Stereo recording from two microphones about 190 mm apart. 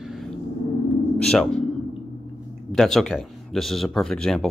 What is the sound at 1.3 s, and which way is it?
Speech, 5° left (ahead or behind).